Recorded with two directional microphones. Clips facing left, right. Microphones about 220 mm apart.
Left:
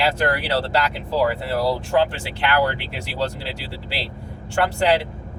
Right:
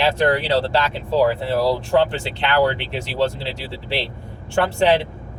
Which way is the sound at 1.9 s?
25° right (ahead or behind).